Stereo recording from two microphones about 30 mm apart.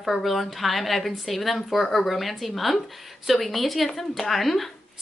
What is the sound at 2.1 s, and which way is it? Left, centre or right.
Speech, centre.